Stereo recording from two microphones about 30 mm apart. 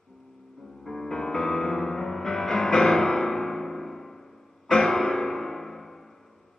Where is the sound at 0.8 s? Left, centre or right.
Centre.